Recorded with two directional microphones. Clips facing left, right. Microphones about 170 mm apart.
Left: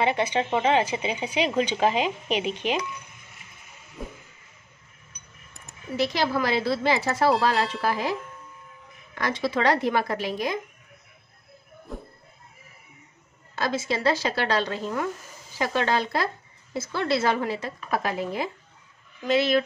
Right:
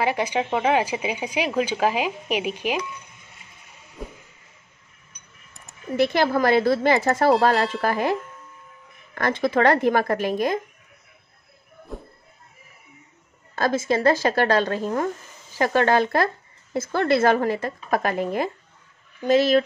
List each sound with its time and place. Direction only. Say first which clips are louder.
0.0 s a woman's voice: right 1 dB; 10° right (ahead or behind)
4.0 s a sound: right 1 dB; centre (ahead or behind)
5.9 s speech: right 5 dB; 55° right (ahead or behind)
7.5 s speech: right 3 dB; centre (ahead or behind)
7.8 s speech: right 4 dB; 55° right (ahead or behind)
13.6 s speech: right 5 dB; 50° right (ahead or behind)